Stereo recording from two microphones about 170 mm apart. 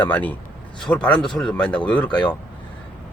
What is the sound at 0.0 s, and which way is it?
Speech, 10° left (ahead or behind).